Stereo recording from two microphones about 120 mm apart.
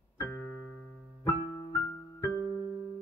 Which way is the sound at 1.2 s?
25° left (ahead or behind).